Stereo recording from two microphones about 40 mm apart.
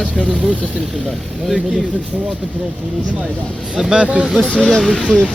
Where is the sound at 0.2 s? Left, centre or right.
Left.